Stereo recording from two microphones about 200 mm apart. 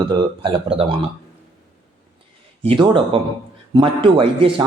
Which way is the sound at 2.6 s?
25° right (ahead or behind).